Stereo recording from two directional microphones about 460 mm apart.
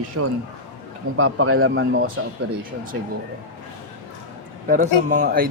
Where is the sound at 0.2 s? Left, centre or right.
Right.